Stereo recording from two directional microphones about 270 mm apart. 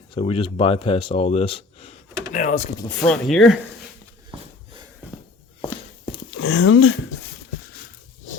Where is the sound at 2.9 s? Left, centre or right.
Centre.